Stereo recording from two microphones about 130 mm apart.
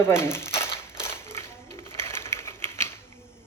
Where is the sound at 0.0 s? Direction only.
20° left (ahead or behind).